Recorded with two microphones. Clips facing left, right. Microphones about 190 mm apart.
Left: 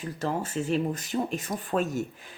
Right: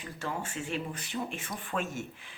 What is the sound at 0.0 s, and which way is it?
Speech, 40° left (ahead or behind).